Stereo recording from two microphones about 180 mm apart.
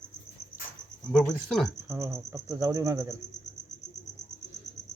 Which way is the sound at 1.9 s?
15° right (ahead or behind).